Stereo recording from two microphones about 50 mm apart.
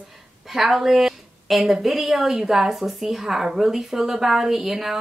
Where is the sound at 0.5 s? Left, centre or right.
Centre.